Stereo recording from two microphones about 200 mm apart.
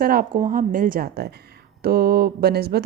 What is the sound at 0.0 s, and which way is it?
Speech, 45° right (ahead or behind).